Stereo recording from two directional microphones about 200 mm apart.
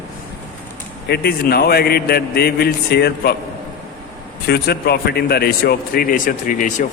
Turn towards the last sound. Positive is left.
turn(degrees=40)  # may be behind; listen again after turning